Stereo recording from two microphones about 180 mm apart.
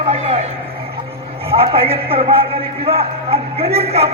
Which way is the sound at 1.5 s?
30° right (ahead or behind).